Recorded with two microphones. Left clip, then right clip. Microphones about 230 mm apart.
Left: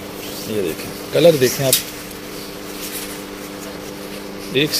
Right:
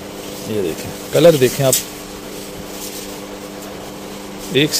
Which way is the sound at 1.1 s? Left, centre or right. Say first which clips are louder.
Right 2 dB; centre.